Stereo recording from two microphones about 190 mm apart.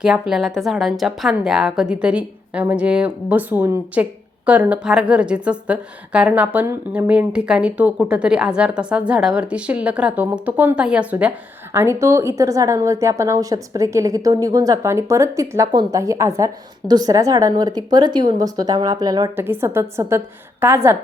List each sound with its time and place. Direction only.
0.0 s a woman's voice: 5° right (ahead or behind)